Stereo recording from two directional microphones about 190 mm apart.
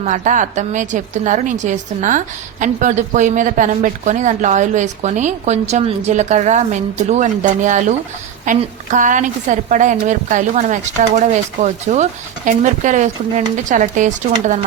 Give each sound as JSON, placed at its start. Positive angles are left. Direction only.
{"t": 0.0, "sound": "a woman's voice", "side_deg": -40}